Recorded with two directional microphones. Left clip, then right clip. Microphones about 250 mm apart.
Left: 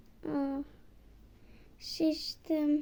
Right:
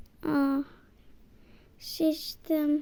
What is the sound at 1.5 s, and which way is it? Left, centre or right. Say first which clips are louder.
Speech: right 1 dB; centre.